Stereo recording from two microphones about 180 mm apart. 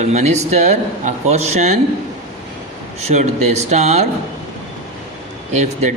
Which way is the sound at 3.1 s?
40° right (ahead or behind).